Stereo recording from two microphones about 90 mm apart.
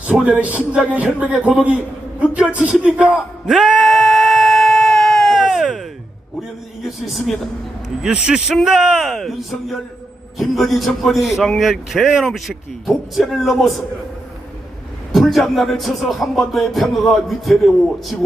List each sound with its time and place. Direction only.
0.1 s speech: 15° right (ahead or behind)
3.4 s a sound: centre (ahead or behind)
8.0 s speech: 10° right (ahead or behind)
8.5 s music: 5° right (ahead or behind)
15.1 s music: centre (ahead or behind)